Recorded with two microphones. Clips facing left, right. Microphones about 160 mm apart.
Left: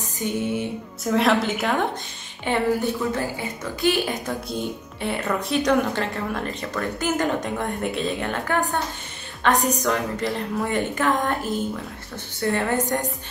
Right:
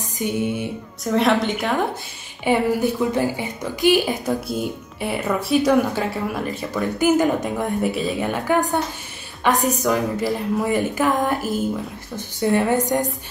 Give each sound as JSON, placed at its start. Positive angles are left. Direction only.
{"t": 0.2, "sound": "a woman's voice", "side_deg": -15}
{"t": 1.0, "sound": "a woman's voice", "side_deg": 0}
{"t": 2.4, "sound": "a woman's voice", "side_deg": -10}
{"t": 4.5, "sound": "a woman's voice", "side_deg": -5}